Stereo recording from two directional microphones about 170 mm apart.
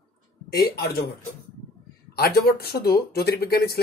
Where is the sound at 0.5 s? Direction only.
65° left (ahead or behind).